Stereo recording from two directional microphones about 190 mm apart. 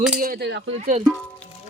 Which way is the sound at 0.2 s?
55° right (ahead or behind).